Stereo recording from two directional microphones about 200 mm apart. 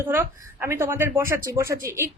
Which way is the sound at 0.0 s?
10° right (ahead or behind).